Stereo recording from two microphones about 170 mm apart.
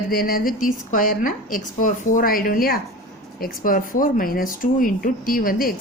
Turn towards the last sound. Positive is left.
turn(degrees=60)  # may be behind; listen again after turning